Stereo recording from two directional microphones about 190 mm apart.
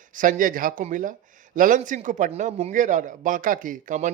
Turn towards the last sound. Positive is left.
turn(degrees=-40)  # may be behind; listen again after turning